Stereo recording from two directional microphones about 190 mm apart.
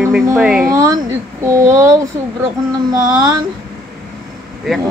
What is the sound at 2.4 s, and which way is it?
Child singing, 20° right (ahead or behind).